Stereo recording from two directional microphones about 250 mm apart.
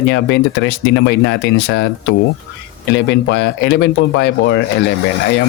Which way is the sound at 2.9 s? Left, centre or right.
Left.